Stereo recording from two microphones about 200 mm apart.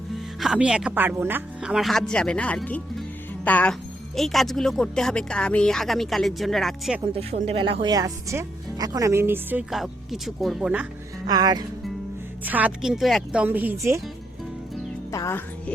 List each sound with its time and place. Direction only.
0.1 s a woman's voice: centre (ahead or behind)
7.0 s speech: 30° right (ahead or behind); by 10.8 s 5° right (ahead or behind)
11.3 s speech: 20° right (ahead or behind)
12.5 s speech: 10° right (ahead or behind)
15.1 s music: 15° left (ahead or behind)